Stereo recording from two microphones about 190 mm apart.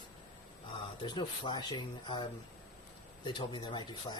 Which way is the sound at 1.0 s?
25° left (ahead or behind).